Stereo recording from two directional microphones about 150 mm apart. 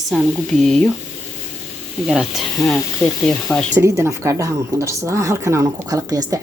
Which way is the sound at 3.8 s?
20° right (ahead or behind).